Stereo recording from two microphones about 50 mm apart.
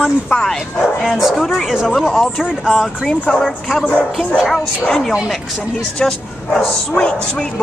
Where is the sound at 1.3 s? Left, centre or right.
Centre.